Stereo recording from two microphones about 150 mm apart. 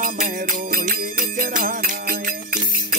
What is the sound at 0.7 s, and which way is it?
Music, 70° right (ahead or behind).